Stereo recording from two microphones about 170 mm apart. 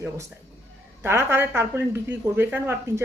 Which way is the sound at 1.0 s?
15° right (ahead or behind).